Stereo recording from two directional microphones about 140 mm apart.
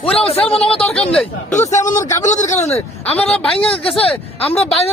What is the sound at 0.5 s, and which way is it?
Speech, 45° left (ahead or behind).